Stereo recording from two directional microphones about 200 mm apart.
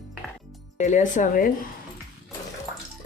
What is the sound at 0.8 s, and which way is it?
Speech, 35° left (ahead or behind).